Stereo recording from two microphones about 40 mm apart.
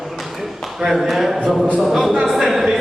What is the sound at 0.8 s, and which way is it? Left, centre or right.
Speech, centre.